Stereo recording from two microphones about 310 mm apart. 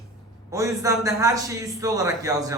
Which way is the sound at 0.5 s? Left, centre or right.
Centre.